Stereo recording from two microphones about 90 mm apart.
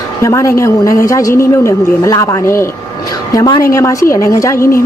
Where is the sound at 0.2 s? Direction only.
35° left (ahead or behind).